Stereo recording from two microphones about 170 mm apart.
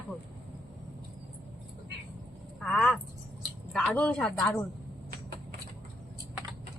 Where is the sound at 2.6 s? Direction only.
5° left (ahead or behind).